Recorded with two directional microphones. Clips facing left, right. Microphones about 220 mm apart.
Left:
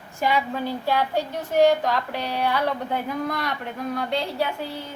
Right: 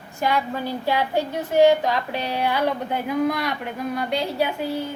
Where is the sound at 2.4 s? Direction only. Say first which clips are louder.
Right 1 dB; 5° right (ahead or behind).